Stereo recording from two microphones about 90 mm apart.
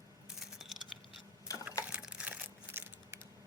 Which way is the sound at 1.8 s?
15° right (ahead or behind).